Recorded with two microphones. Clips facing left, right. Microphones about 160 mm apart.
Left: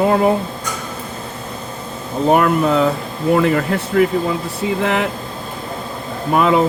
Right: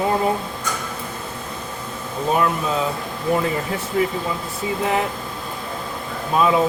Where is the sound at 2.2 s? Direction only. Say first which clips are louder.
Left 7 dB; 65° left (ahead or behind).